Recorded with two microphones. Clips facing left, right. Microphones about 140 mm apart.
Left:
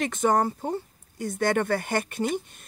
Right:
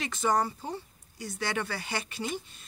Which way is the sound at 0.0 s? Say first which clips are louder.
Left 5 dB; 50° left (ahead or behind).